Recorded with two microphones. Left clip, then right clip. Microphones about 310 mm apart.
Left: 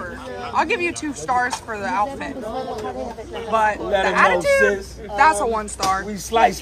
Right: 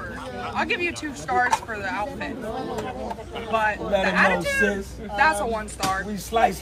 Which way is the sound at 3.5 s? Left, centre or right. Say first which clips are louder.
Left 4 dB; left.